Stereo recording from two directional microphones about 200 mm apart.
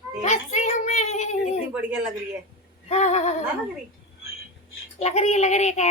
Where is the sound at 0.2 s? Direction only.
35° left (ahead or behind).